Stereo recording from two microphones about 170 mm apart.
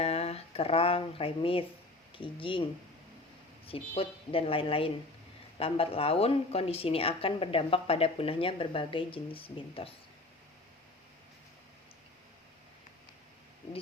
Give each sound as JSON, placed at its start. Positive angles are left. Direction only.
{"t": 0.0, "sound": "a woman's voice", "side_deg": 35}
{"t": 3.7, "sound": "a woman's voice", "side_deg": 35}